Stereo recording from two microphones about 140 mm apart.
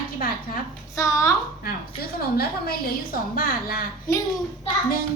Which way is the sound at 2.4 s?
90° left.